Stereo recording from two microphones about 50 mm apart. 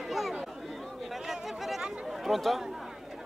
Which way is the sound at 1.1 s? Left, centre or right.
Centre.